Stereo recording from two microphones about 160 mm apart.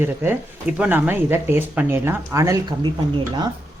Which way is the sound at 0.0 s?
15° right (ahead or behind).